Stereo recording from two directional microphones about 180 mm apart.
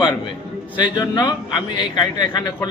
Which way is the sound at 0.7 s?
25° left (ahead or behind).